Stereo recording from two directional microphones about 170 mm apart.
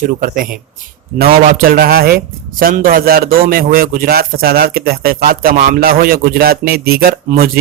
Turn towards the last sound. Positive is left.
turn(degrees=-60)  # may be behind; listen again after turning